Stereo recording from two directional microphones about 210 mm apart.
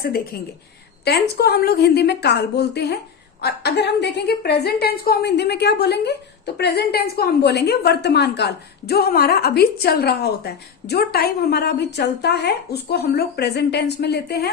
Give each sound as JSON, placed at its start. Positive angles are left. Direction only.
{"t": 0.0, "sound": "a woman's voice", "side_deg": 45}